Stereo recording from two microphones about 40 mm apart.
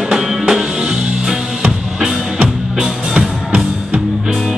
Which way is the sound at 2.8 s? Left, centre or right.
Right.